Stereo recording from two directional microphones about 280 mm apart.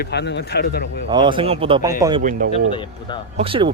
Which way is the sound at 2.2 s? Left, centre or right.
Right.